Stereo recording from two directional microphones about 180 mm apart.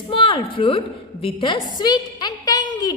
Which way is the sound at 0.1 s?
30° left (ahead or behind).